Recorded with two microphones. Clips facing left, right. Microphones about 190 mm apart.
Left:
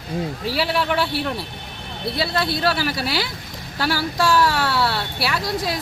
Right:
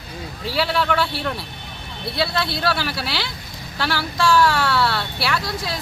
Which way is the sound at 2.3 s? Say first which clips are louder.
Left 2 dB; 40° left (ahead or behind).